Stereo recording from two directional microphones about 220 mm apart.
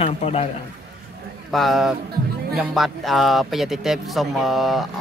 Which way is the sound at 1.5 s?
Centre (ahead or behind).